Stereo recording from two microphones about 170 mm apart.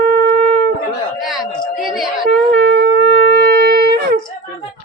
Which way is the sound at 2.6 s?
85° right.